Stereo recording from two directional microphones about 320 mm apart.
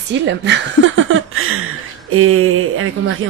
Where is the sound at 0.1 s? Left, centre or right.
Right.